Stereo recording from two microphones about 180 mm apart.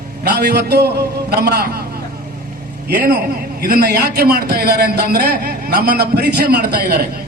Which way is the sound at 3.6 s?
55° right (ahead or behind).